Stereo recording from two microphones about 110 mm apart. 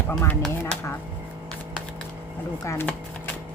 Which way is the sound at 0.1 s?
20° left (ahead or behind).